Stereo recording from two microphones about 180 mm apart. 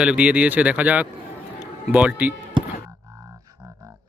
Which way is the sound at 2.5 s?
20° right (ahead or behind).